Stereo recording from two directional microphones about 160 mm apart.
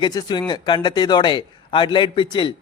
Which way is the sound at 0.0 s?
25° left (ahead or behind).